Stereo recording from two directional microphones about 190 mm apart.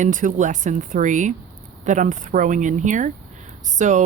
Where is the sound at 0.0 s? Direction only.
40° right (ahead or behind).